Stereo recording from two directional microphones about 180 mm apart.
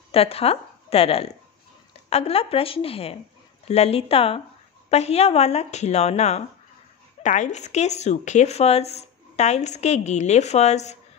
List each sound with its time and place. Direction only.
0.1 s a woman's voice: 35° left (ahead or behind)